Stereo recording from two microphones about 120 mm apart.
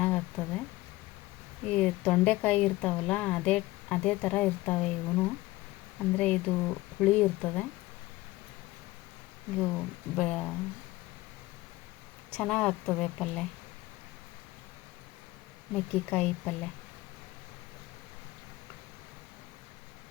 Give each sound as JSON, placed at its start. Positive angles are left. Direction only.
{"t": 0.0, "sound": "a sound", "side_deg": 10}
{"t": 1.6, "sound": "speech", "side_deg": 10}
{"t": 9.6, "sound": "speech", "side_deg": 10}
{"t": 12.3, "sound": "speech", "side_deg": 5}
{"t": 15.7, "sound": "speech", "side_deg": 10}